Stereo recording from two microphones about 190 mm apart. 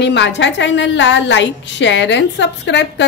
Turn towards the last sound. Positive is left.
turn(degrees=65)  # may be behind; listen again after turning